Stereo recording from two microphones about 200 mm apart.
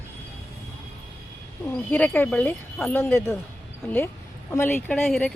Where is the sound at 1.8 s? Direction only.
10° left (ahead or behind).